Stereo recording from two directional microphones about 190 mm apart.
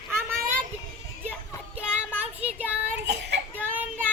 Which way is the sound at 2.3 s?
5° right (ahead or behind).